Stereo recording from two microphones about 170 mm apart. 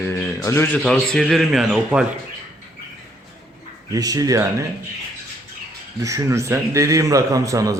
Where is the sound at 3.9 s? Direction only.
20° right (ahead or behind).